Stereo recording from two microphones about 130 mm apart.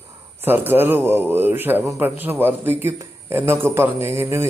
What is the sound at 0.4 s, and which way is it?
Speech, 15° right (ahead or behind).